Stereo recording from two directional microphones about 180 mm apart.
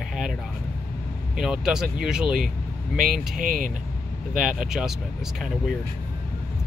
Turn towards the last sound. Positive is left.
turn(degrees=0)  # may be behind; listen again after turning